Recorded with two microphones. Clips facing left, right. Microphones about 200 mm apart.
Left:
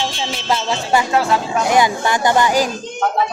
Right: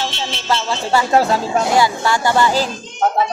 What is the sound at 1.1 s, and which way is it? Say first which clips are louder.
Speech: right 2 dB; 40° right (ahead or behind).